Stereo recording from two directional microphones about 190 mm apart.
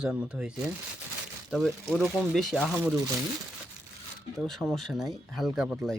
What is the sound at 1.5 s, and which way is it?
Speech, centre (ahead or behind).